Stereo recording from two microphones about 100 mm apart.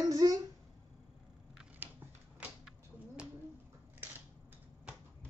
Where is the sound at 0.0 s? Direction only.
40° right (ahead or behind).